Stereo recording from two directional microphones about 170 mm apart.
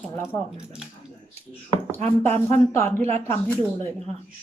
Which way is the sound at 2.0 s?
40° right (ahead or behind).